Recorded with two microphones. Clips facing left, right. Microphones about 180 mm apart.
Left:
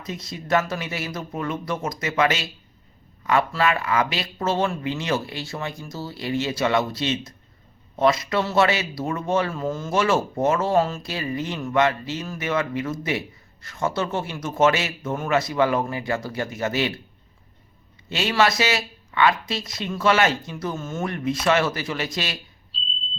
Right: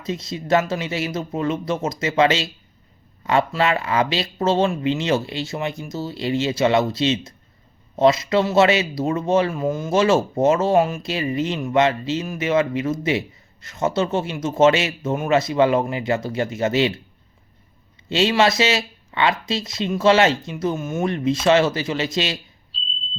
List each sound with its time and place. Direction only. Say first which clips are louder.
0.0 s speech: right 6 dB; 25° right (ahead or behind)
18.1 s speech: right 4 dB; 25° right (ahead or behind)
22.7 s smoke detector: even; centre (ahead or behind)